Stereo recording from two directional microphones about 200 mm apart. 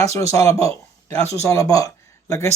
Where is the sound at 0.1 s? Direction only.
15° left (ahead or behind).